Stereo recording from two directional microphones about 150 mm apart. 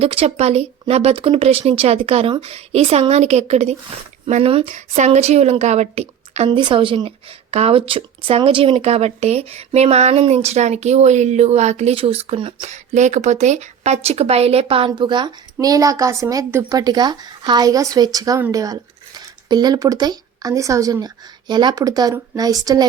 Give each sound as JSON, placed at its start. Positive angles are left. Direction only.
{"t": 0.0, "sound": "a woman's voice", "side_deg": -40}